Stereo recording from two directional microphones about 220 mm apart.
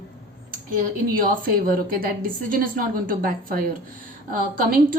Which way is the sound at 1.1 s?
40° right (ahead or behind).